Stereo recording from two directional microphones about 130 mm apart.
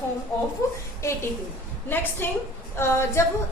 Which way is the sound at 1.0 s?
20° left (ahead or behind).